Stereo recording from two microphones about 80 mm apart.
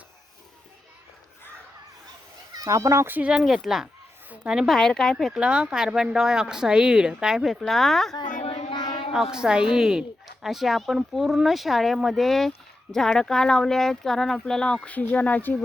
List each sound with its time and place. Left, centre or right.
2.5 s speech: right
3.1 s speech: centre
3.3 s speech: centre
4.7 s speech: centre
5.4 s speech: centre
8.7 s a sound: left
9.1 s speech: centre; by 15.5 s left